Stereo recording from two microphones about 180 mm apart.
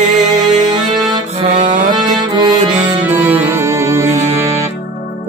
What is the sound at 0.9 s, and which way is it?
Music, 20° right (ahead or behind).